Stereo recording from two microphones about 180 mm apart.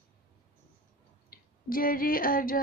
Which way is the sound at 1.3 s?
55° left (ahead or behind).